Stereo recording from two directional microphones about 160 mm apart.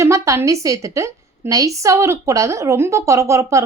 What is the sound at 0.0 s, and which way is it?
A woman's voice, 20° right (ahead or behind).